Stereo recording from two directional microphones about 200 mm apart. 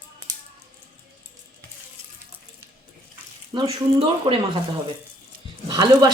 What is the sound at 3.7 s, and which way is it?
Speech, 25° right (ahead or behind).